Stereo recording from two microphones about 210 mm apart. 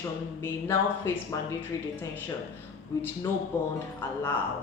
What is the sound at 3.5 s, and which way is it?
Speech, 10° left (ahead or behind).